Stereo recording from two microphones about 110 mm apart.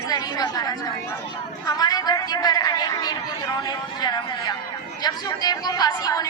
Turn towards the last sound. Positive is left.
turn(degrees=35)  # may be behind; listen again after turning